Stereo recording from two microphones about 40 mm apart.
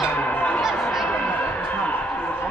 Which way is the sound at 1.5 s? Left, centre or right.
Left.